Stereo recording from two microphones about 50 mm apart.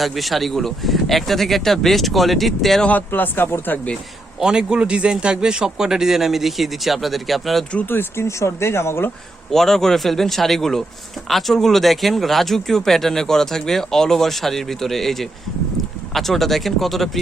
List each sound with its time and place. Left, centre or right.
0.0 s speech: centre
3.1 s speech: left
4.4 s a man's voice: centre
7.9 s speech: left
9.5 s speech: centre